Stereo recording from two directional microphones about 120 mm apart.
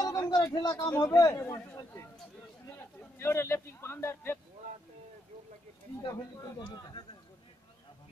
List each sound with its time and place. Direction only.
0.0 s a sound: 35° left (ahead or behind)
0.4 s speech: 30° left (ahead or behind)
1.4 s a man's voice: 15° left (ahead or behind)
2.8 s speech: 20° left (ahead or behind)
6.0 s speech: 35° left (ahead or behind)